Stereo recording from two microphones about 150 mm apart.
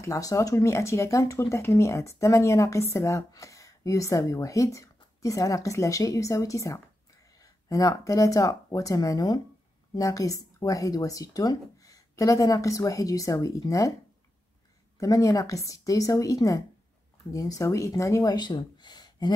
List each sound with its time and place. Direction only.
0.0 s speech: 20° left (ahead or behind)
15.0 s speech: 20° left (ahead or behind)